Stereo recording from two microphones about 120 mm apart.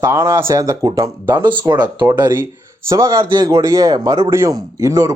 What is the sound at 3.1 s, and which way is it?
Speech, 40° right (ahead or behind).